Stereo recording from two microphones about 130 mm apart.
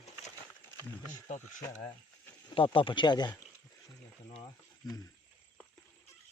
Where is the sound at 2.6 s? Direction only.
40° left (ahead or behind).